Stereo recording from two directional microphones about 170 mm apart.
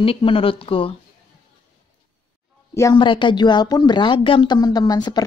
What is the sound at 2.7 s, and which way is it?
Speech, 15° left (ahead or behind).